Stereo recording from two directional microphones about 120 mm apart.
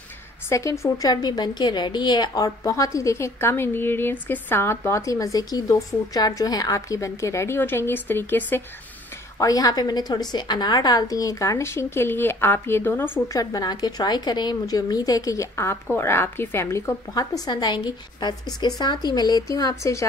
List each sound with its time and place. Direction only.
0.5 s a woman's voice: 25° left (ahead or behind)
9.4 s a woman's voice: 30° left (ahead or behind)
13.3 s a woman's voice: 30° left (ahead or behind)